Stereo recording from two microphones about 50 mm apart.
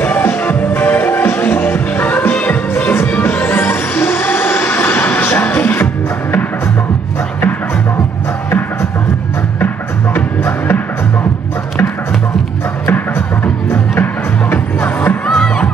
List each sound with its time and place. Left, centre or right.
0.0 s music: left
2.8 s music: left
3.1 s music: left
10.1 s music: left
14.5 s music: left
15.2 s music: centre